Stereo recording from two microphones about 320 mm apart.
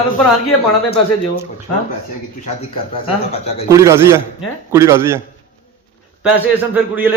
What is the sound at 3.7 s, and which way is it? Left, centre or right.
Speech, centre.